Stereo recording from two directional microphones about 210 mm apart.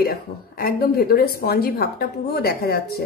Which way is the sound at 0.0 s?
45° left (ahead or behind).